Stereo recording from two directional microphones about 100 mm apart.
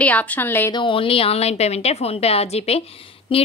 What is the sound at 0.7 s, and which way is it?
A woman's voice, 55° left (ahead or behind).